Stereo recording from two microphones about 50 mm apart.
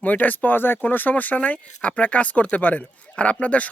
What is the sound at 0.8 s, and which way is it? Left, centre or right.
Speech, left.